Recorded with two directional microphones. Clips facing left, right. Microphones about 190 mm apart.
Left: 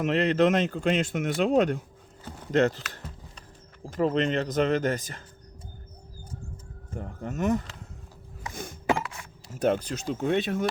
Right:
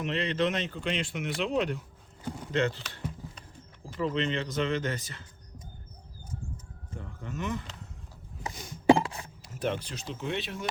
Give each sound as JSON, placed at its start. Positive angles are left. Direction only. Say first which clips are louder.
{"t": 0.0, "sound": "speech", "louder": "left 7 dB", "side_deg": 45}
{"t": 3.8, "sound": "speech", "louder": "left 5 dB", "side_deg": 45}
{"t": 6.9, "sound": "speech", "louder": "left 5 dB", "side_deg": 45}
{"t": 8.5, "sound": "a sound", "louder": "left 6 dB", "side_deg": 50}
{"t": 8.9, "sound": "a sound", "louder": "right 6 dB", "side_deg": -30}
{"t": 9.6, "sound": "speech", "louder": "left 7 dB", "side_deg": 45}